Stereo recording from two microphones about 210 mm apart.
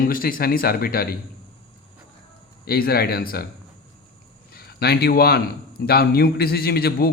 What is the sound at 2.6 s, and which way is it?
Speech, 45° left (ahead or behind).